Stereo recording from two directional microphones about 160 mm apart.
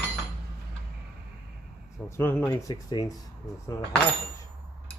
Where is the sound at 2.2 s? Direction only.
15° left (ahead or behind).